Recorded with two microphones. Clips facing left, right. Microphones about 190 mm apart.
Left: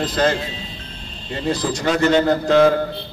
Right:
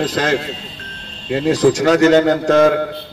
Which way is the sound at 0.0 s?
90° right.